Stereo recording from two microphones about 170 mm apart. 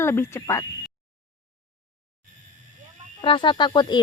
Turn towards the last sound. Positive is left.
turn(degrees=25)  # may be behind; listen again after turning